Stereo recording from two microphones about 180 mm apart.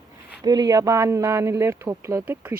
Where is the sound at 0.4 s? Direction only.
20° right (ahead or behind).